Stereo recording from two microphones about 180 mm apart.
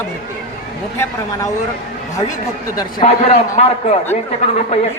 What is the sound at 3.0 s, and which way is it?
A woman's voice, 35° left (ahead or behind).